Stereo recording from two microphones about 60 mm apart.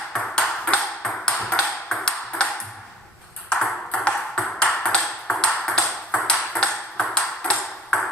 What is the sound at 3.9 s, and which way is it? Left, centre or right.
Ping, centre.